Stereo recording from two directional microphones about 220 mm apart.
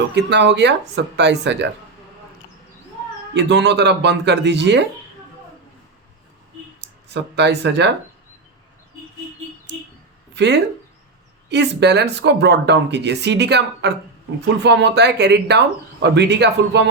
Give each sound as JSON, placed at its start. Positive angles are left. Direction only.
{"t": 0.1, "sound": "speech", "side_deg": -50}
{"t": 3.3, "sound": "speech", "side_deg": -50}
{"t": 6.8, "sound": "speech", "side_deg": -50}
{"t": 10.3, "sound": "speech", "side_deg": -50}